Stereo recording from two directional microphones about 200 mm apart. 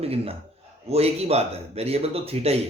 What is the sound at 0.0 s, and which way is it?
A man's voice, 30° right (ahead or behind).